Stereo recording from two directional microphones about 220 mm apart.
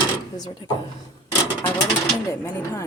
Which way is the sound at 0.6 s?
20° left (ahead or behind).